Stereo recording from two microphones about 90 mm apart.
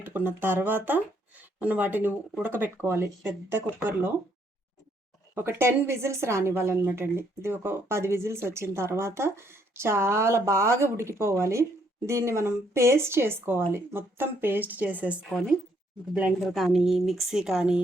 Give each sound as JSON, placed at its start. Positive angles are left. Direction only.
{"t": 0.0, "sound": "a woman's voice", "side_deg": -20}
{"t": 5.3, "sound": "a woman's voice", "side_deg": -30}
{"t": 16.4, "sound": "speech", "side_deg": 0}